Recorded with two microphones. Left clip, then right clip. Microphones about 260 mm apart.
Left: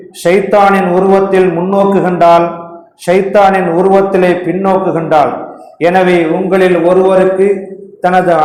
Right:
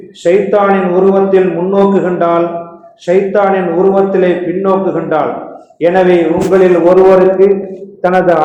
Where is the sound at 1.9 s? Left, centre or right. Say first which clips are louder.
Left 4 dB; left.